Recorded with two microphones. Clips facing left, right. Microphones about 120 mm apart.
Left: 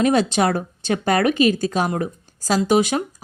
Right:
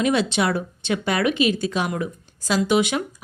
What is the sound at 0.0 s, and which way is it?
Speech, 40° left (ahead or behind).